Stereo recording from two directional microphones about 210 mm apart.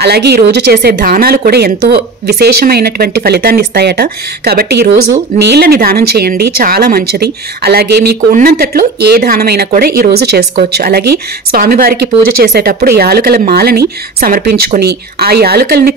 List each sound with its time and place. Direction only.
0.0 s speech: 50° right (ahead or behind)